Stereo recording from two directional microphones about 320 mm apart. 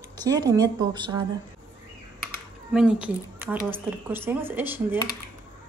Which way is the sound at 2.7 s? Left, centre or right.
Centre.